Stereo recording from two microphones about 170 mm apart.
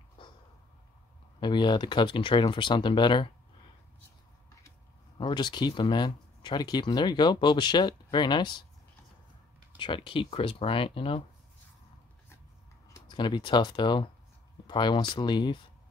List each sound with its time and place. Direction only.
1.4 s speech: 30° left (ahead or behind)
5.1 s speech: 25° left (ahead or behind)
9.8 s speech: 30° left (ahead or behind)
12.9 s speech: 25° left (ahead or behind)